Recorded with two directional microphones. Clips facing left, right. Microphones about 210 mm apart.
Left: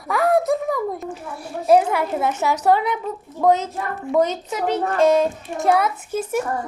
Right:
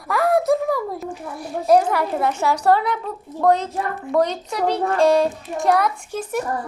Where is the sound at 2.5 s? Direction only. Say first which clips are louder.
Even; 20° left (ahead or behind).